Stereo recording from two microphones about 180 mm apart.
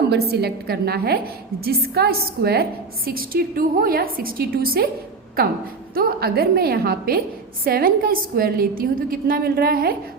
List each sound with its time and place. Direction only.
0.1 s a woman's voice: 65° right (ahead or behind)